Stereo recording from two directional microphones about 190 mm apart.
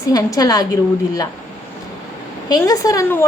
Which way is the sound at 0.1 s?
20° left (ahead or behind).